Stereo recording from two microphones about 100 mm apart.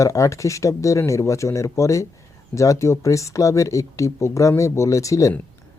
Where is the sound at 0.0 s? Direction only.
30° left (ahead or behind).